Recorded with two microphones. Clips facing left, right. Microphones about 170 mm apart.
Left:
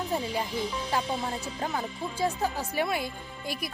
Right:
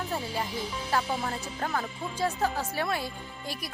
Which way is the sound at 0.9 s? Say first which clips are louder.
Right 4 dB; 15° left (ahead or behind).